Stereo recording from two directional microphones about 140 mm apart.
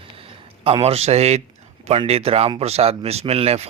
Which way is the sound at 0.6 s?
45° right (ahead or behind).